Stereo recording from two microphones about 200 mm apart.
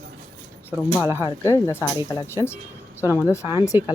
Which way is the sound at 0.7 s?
10° right (ahead or behind).